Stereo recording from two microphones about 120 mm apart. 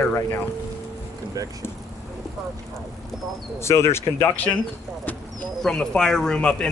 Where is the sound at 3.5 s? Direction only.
25° left (ahead or behind).